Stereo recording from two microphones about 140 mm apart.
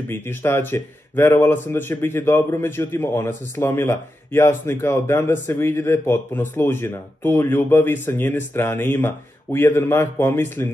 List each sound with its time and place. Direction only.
0.1 s a man's voice: 15° left (ahead or behind)